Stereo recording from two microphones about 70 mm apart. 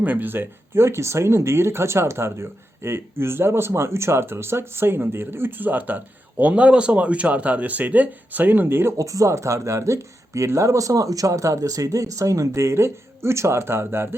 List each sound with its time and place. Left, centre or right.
0.0 s speech: right
9.0 s speech: right